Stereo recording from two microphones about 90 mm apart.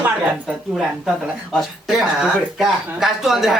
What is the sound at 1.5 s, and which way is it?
Speech, 5° right (ahead or behind).